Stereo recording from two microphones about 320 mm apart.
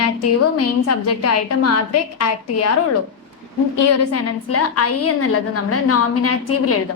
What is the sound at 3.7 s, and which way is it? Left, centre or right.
A woman's voice, left.